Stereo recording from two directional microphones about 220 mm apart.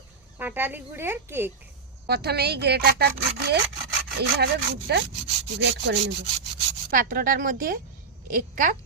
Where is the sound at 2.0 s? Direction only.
45° right (ahead or behind).